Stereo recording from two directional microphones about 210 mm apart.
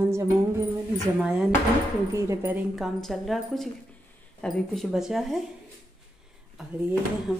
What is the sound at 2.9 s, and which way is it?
Speech, centre (ahead or behind).